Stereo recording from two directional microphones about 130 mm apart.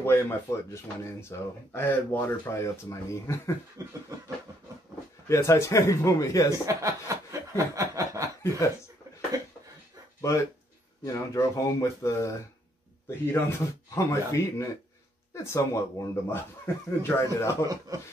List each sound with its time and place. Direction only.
0.0 s speech: 20° left (ahead or behind)
3.8 s speech: 30° right (ahead or behind)
5.3 s speech: 20° left (ahead or behind)
6.5 s speech: 25° right (ahead or behind)
10.2 s speech: 20° left (ahead or behind)
17.6 s speech: 25° right (ahead or behind)